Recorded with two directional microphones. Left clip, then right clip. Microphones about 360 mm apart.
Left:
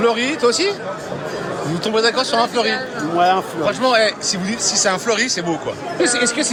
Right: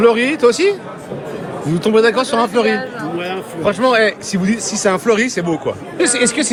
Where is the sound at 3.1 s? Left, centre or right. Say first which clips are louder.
Left 10 dB; centre.